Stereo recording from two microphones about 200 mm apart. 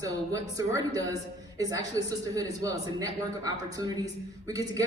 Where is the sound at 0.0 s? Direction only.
15° right (ahead or behind).